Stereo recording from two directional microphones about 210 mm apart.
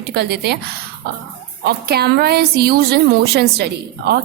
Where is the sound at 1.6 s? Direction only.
50° right (ahead or behind).